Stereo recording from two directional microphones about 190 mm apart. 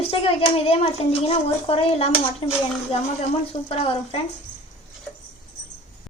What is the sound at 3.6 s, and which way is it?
Speech, 30° left (ahead or behind).